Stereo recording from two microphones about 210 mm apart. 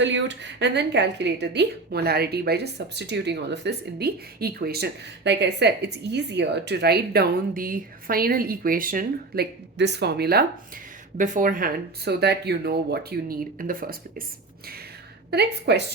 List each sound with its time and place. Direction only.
0.0 s speech: 60° right (ahead or behind); by 13.9 s 40° right (ahead or behind)
15.3 s speech: 50° right (ahead or behind)